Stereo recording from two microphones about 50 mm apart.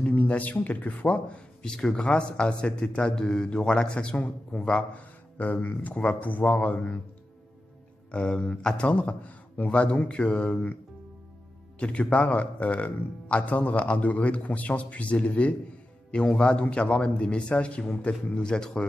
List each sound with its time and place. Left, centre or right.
0.0 s a man's voice: left
8.1 s speech: left
11.8 s a man's voice: left